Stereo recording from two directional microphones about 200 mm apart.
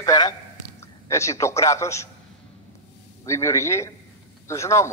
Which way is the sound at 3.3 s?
15° left (ahead or behind).